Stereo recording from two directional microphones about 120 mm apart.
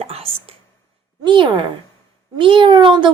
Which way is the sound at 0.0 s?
55° right (ahead or behind).